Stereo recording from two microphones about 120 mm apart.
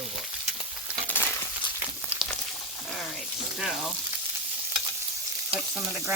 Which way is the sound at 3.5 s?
5° right (ahead or behind).